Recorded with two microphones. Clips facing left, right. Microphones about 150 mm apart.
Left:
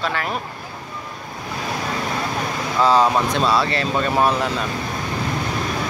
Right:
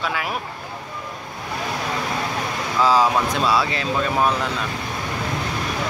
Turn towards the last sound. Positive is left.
turn(degrees=5)  # may be behind; listen again after turning